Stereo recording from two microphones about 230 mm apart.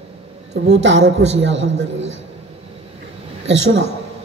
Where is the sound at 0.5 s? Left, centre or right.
Right.